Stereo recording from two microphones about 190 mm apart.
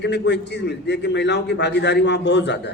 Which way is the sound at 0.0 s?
65° left (ahead or behind).